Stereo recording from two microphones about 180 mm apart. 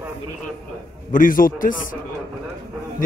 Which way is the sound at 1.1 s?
50° left (ahead or behind).